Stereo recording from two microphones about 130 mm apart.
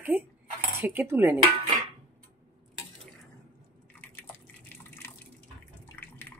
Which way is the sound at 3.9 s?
10° left (ahead or behind).